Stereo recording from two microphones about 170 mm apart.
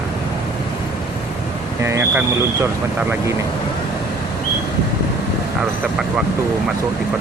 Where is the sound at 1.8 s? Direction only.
15° right (ahead or behind).